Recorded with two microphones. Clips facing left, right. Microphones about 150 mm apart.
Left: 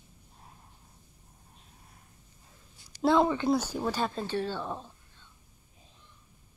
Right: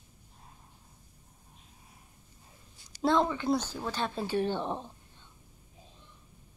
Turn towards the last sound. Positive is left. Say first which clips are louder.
# right 3 dB
turn(degrees=-20)  # may be behind; listen again after turning